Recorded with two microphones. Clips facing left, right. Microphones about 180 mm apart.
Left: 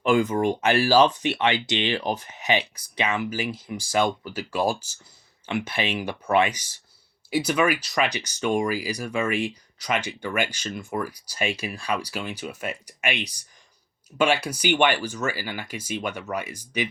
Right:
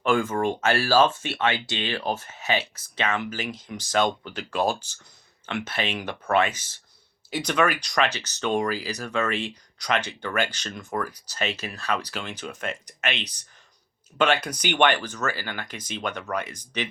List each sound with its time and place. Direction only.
0.0 s speech: 15° left (ahead or behind)